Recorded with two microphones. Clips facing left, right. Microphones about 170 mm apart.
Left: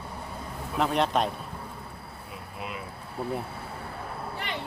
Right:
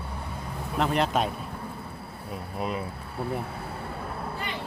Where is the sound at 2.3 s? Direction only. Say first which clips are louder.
Right 7 dB; 40° right (ahead or behind).